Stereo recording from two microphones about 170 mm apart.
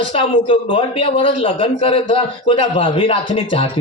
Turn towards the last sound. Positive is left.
turn(degrees=30)  # may be behind; listen again after turning